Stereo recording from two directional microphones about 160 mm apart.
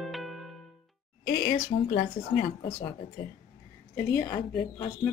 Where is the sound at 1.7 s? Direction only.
35° left (ahead or behind).